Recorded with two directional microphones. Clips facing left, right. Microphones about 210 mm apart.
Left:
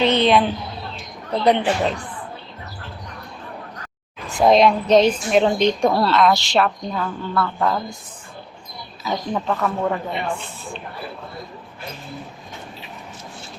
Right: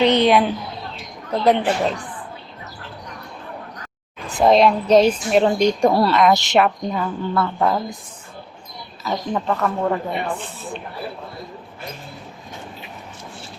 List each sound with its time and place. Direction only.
0.0 s a woman's voice: 15° right (ahead or behind)
1.3 s speech: centre (ahead or behind)
4.3 s a woman's voice: centre (ahead or behind)
9.0 s speech: centre (ahead or behind)
10.1 s a woman's voice: 15° right (ahead or behind)